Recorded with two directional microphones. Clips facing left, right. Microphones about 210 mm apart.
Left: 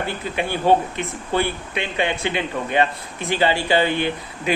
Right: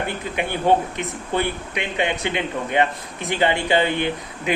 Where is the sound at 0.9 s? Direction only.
20° right (ahead or behind).